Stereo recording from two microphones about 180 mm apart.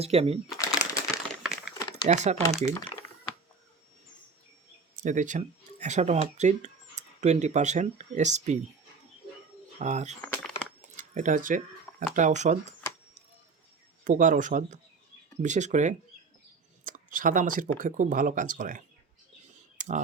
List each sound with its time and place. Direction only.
0.0 s speech: 35° right (ahead or behind)
0.6 s crumpling: 20° left (ahead or behind)
1.4 s a sound: 5° right (ahead or behind)
1.8 s crumpling: 25° left (ahead or behind)
2.0 s speech: 40° right (ahead or behind)
2.5 s speech: 5° left (ahead or behind)
5.0 s speech: 45° right (ahead or behind)
9.7 s speech: 40° right (ahead or behind)
10.2 s a sound: 10° left (ahead or behind)
10.9 s a sound: 45° right (ahead or behind)
12.1 s speech: 40° right (ahead or behind)
14.0 s speech: 45° right (ahead or behind)
19.8 s clicking: 45° right (ahead or behind)